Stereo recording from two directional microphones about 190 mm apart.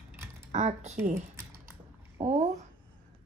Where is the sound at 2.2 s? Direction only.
35° right (ahead or behind).